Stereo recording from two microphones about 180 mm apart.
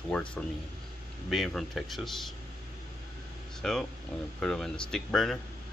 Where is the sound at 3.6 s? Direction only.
Centre (ahead or behind).